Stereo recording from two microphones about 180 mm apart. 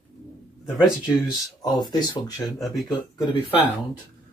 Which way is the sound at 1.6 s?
20° left (ahead or behind).